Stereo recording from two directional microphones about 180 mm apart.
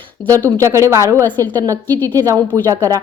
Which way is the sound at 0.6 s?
15° right (ahead or behind).